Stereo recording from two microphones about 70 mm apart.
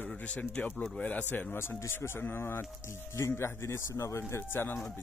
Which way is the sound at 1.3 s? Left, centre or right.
Left.